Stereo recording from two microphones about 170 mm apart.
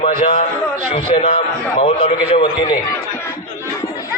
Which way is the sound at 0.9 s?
40° left (ahead or behind).